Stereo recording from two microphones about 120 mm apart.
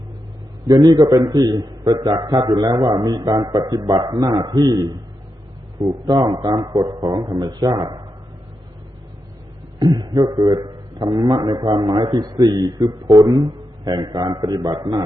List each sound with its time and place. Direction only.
0.7 s a man's voice: 30° right (ahead or behind)
9.7 s a man's voice: 35° right (ahead or behind)